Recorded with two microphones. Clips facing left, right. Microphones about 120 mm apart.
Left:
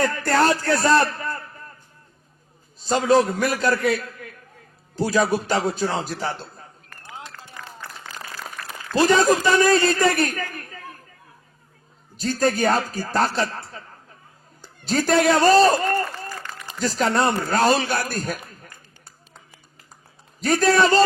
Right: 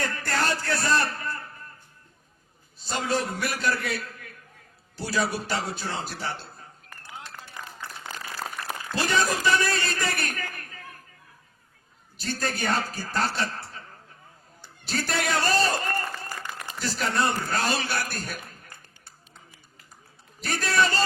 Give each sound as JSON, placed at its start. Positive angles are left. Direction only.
{"t": 0.0, "sound": "a man's voice", "side_deg": 40}
{"t": 3.1, "sound": "a man's voice", "side_deg": 40}
{"t": 4.9, "sound": "a man's voice", "side_deg": 40}
{"t": 7.6, "sound": "a sound", "side_deg": -15}
{"t": 9.0, "sound": "a man's voice", "side_deg": 40}
{"t": 12.2, "sound": "a man's voice", "side_deg": 40}
{"t": 14.8, "sound": "a man's voice", "side_deg": 40}
{"t": 15.9, "sound": "a man's voice", "side_deg": 50}
{"t": 20.5, "sound": "a man's voice", "side_deg": 40}